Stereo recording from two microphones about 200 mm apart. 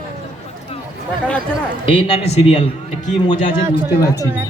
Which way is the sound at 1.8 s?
25° left (ahead or behind).